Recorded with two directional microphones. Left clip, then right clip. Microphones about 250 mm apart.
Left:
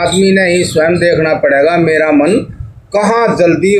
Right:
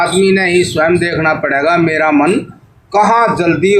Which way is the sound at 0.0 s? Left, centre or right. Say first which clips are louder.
Left 1 dB; right.